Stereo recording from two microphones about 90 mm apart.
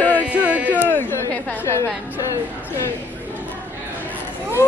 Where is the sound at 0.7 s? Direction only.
20° left (ahead or behind).